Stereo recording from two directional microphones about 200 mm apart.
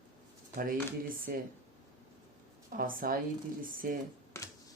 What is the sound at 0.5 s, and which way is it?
Speech, 45° right (ahead or behind).